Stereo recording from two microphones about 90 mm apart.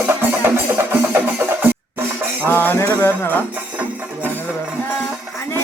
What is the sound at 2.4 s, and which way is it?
Music, 20° left (ahead or behind).